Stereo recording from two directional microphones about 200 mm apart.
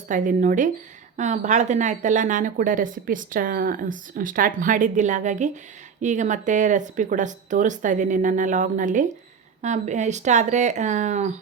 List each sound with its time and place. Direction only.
0.1 s speech: 40° right (ahead or behind)